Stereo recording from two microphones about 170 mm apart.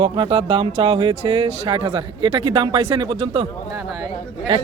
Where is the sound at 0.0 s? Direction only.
30° right (ahead or behind).